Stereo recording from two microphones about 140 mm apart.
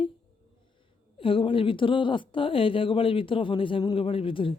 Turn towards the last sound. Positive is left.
turn(degrees=40)  # may be behind; listen again after turning